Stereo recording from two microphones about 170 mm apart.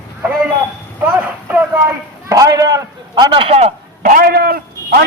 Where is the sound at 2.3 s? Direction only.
20° right (ahead or behind).